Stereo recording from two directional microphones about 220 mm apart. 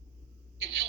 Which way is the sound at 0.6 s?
50° right (ahead or behind).